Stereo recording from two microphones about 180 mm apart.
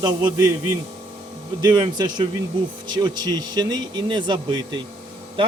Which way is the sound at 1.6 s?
20° right (ahead or behind).